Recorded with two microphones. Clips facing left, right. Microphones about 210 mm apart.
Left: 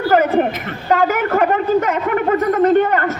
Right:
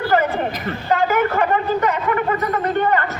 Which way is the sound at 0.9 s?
50° left (ahead or behind).